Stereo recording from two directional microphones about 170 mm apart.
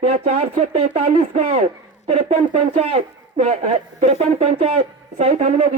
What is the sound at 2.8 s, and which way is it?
Speech, 40° right (ahead or behind).